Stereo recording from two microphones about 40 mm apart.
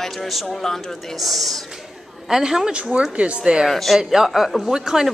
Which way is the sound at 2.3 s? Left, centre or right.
Centre.